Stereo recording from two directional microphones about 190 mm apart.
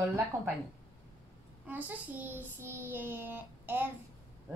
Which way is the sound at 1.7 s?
10° right (ahead or behind).